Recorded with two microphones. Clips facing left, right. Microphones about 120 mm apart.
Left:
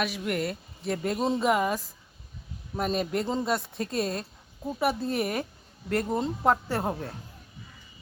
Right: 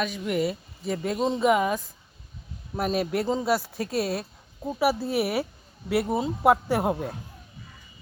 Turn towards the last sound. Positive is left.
turn(degrees=-15)  # may be behind; listen again after turning